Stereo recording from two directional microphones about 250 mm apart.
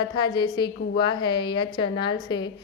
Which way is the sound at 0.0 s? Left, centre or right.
Centre.